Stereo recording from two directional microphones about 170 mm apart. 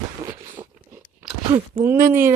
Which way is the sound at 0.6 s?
20° right (ahead or behind).